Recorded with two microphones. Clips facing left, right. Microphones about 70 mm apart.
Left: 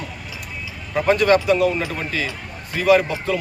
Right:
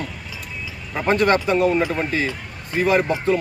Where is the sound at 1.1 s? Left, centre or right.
Right.